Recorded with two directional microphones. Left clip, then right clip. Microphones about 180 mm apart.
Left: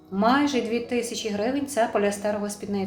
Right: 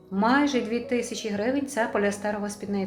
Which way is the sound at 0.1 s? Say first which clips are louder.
Left 1 dB; 20° right (ahead or behind).